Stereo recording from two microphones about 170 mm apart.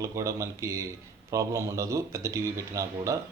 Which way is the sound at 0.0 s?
20° right (ahead or behind).